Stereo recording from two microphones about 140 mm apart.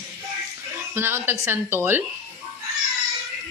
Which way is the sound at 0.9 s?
15° right (ahead or behind).